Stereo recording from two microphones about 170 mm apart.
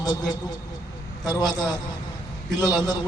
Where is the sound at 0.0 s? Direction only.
25° left (ahead or behind).